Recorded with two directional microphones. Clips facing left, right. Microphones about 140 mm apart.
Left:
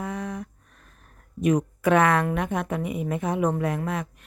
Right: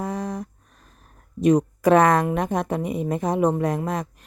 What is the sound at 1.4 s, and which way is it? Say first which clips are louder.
A woman's voice: right 4 dB; 35° right (ahead or behind).